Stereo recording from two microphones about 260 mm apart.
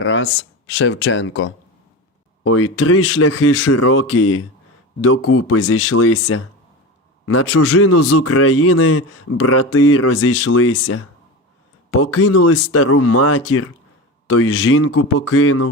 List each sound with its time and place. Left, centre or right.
0.0 s speech: left
2.4 s a man's voice: left